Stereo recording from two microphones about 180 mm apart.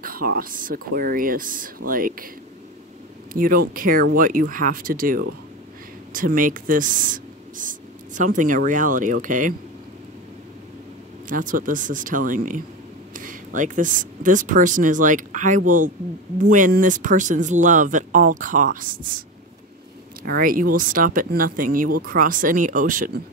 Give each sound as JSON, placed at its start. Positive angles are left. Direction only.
{"t": 0.0, "sound": "speech", "side_deg": -55}
{"t": 3.3, "sound": "speech", "side_deg": -50}
{"t": 11.2, "sound": "speech", "side_deg": -50}
{"t": 20.2, "sound": "speech", "side_deg": -55}